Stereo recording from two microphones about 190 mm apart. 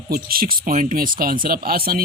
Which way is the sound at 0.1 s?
50° right (ahead or behind).